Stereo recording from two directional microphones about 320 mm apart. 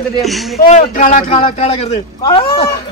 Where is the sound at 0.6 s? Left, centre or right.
Left.